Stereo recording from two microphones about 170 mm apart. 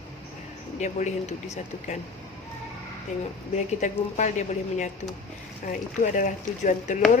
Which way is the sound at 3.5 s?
45° left (ahead or behind).